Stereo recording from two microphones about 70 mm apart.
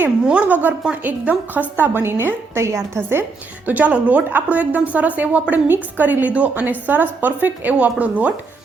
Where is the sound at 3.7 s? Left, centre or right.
Right.